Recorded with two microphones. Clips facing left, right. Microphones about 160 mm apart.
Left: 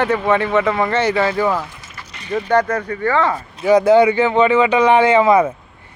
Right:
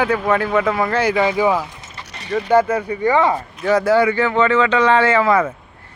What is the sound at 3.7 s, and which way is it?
Speech, 20° left (ahead or behind).